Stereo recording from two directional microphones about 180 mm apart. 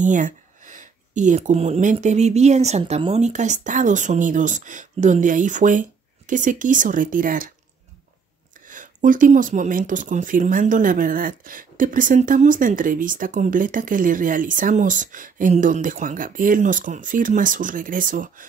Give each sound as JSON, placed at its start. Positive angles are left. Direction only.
{"t": 0.0, "sound": "speech", "side_deg": -45}
{"t": 8.6, "sound": "speech", "side_deg": -45}